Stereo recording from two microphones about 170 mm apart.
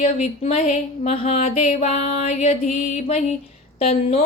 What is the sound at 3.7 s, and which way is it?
Speech, 40° left (ahead or behind).